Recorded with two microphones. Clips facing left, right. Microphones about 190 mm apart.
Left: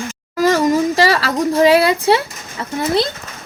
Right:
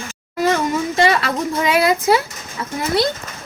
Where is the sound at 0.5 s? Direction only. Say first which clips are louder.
Left 4 dB; 35° left (ahead or behind).